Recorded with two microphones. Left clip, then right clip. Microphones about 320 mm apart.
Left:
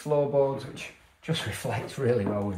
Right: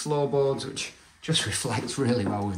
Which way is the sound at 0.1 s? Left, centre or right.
Centre.